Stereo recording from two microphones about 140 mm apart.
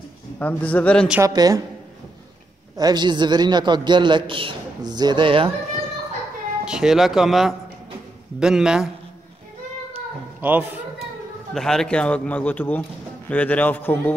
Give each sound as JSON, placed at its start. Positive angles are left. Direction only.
{"t": 0.4, "sound": "a man's voice", "side_deg": 10}
{"t": 1.2, "sound": "a woman's voice", "side_deg": -25}
{"t": 2.8, "sound": "a man's voice", "side_deg": -30}
{"t": 6.6, "sound": "speech", "side_deg": -5}
{"t": 10.4, "sound": "a man's voice", "side_deg": -15}
{"t": 11.5, "sound": "a man's voice", "side_deg": 5}